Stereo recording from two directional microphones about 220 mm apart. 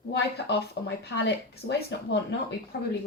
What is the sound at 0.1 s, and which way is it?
Speech, 50° left (ahead or behind).